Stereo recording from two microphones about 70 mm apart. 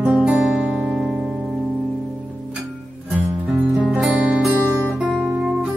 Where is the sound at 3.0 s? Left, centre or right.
Right.